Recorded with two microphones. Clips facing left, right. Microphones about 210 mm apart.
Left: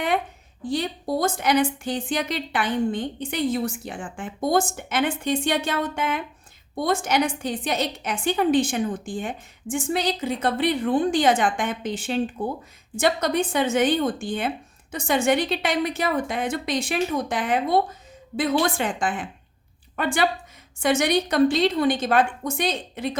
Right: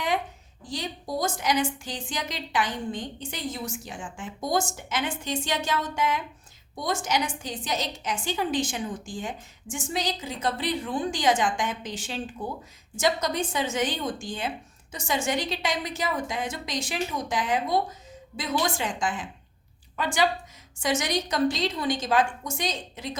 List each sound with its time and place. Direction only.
0.6 s a woman's voice: 60° left (ahead or behind)